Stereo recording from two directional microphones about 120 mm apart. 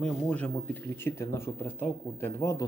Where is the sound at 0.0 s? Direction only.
10° left (ahead or behind).